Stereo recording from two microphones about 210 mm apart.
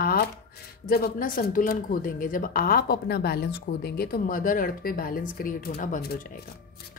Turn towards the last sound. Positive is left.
turn(degrees=40)  # may be behind; listen again after turning